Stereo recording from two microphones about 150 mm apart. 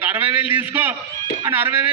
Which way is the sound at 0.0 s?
10° right (ahead or behind).